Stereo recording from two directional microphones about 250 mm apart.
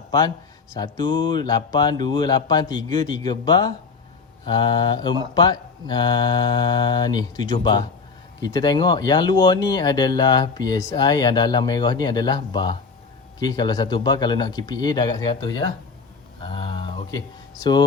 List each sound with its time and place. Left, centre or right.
0.7 s speech: centre
16.4 s a sound: left
17.6 s speech: centre